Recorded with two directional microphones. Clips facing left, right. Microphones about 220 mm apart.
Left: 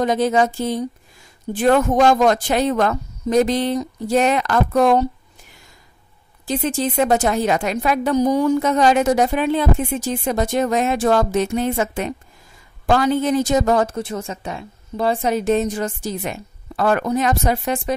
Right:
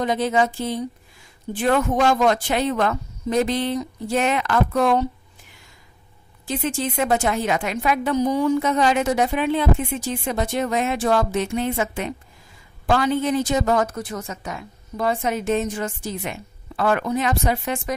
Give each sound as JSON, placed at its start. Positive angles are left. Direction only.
{"t": 0.0, "sound": "a woman's voice", "side_deg": 45}
{"t": 6.4, "sound": "a woman's voice", "side_deg": 40}